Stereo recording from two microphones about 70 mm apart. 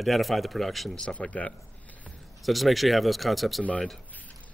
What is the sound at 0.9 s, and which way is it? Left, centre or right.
Speech, centre.